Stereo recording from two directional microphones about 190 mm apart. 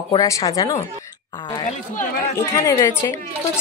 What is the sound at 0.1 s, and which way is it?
A woman's voice, 20° left (ahead or behind).